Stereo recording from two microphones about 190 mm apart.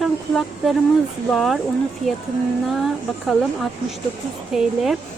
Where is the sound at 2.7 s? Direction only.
Centre (ahead or behind).